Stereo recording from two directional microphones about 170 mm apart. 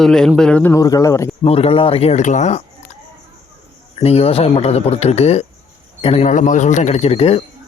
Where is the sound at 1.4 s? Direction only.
35° left (ahead or behind).